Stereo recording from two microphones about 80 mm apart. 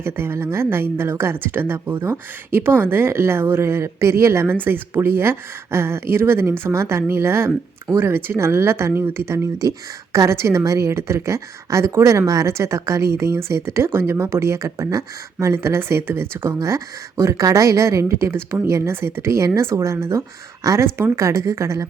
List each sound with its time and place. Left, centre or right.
0.0 s speech: right